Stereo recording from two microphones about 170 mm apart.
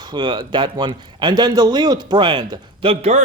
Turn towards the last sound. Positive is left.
turn(degrees=-40)  # may be behind; listen again after turning